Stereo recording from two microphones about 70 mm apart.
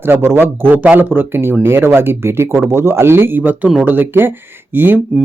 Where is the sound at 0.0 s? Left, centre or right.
Right.